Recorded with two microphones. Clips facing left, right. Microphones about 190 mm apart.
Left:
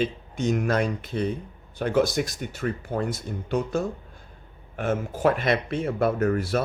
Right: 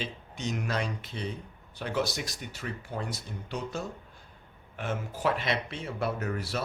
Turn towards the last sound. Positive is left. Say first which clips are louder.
# left 9 dB
turn(degrees=50)  # may be behind; listen again after turning